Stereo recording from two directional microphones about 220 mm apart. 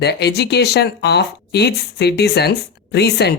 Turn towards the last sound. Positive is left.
turn(degrees=50)  # may be behind; listen again after turning